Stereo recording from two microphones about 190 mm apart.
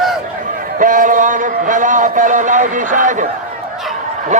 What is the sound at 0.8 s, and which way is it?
A man's voice, 45° right (ahead or behind).